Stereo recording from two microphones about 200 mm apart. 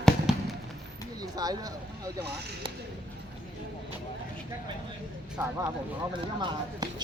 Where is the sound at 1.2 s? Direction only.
20° right (ahead or behind).